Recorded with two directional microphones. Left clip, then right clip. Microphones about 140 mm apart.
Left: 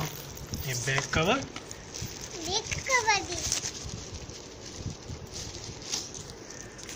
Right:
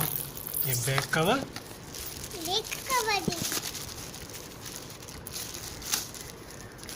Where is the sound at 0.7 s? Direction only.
15° right (ahead or behind).